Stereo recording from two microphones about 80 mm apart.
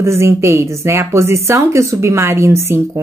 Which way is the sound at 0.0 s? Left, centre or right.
Right.